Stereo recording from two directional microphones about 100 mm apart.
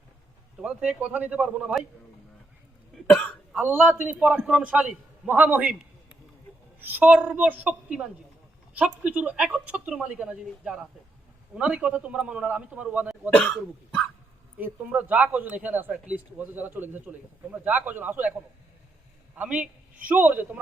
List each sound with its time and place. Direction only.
0.6 s speech: 10° right (ahead or behind)
2.9 s cough: 10° left (ahead or behind)
3.9 s speech: 15° right (ahead or behind)
13.3 s speech: 15° left (ahead or behind)
14.6 s speech: 15° right (ahead or behind)
19.4 s speech: 10° right (ahead or behind)